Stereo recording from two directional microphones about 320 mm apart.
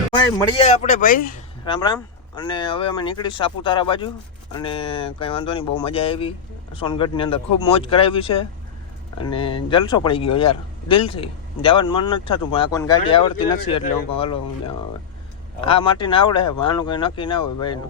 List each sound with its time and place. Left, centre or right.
0.5 s speech: centre
1.6 s speech: centre